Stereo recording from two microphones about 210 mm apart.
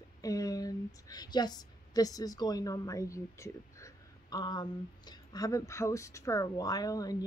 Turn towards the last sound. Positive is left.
turn(degrees=15)  # may be behind; listen again after turning